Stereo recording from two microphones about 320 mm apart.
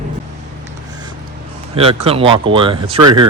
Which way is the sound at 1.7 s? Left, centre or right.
Centre.